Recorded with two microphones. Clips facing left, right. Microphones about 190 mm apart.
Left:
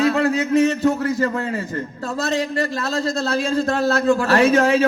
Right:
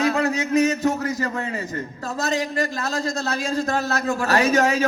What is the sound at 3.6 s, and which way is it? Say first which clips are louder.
Speech: left 5 dB; 35° left (ahead or behind).